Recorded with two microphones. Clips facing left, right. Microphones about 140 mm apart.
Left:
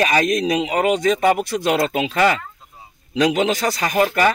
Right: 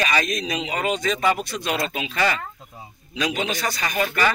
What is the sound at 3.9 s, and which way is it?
Speech, 40° left (ahead or behind).